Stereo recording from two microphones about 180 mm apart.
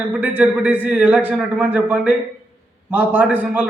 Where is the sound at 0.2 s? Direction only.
10° right (ahead or behind).